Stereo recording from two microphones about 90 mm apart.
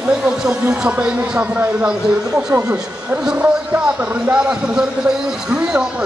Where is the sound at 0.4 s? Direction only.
10° right (ahead or behind).